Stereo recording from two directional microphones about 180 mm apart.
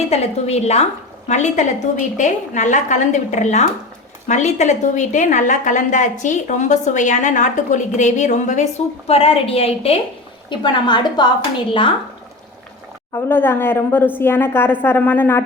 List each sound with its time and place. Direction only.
0.1 s a woman's voice: 35° left (ahead or behind)
13.1 s a woman's voice: 10° left (ahead or behind)